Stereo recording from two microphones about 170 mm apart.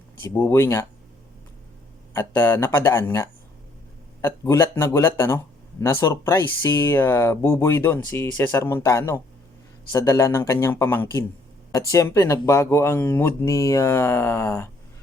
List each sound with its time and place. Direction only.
0.2 s speech: 10° left (ahead or behind)
2.1 s speech: 15° left (ahead or behind)